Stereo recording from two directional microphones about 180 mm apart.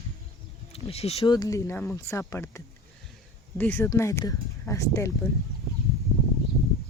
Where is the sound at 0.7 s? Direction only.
35° left (ahead or behind).